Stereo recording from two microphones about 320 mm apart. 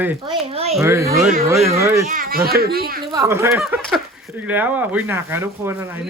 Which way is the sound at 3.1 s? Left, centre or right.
Centre.